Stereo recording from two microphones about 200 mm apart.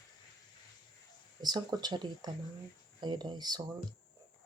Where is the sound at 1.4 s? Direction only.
20° right (ahead or behind).